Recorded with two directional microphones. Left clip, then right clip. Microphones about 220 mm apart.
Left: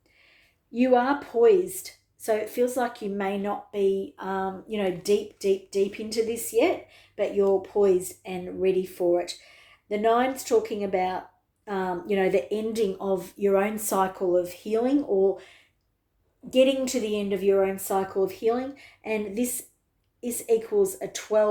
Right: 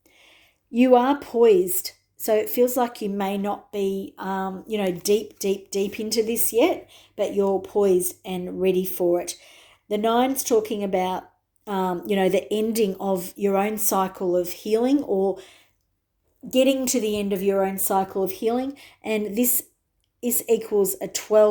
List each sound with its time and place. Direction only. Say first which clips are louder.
0.2 s speech: right 4 dB; 45° right (ahead or behind)